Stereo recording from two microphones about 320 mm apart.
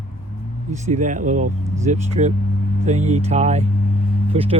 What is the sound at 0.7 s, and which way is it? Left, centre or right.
Speech, right.